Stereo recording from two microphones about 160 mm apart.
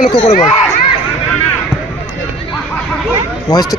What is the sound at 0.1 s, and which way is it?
Speech, 35° left (ahead or behind).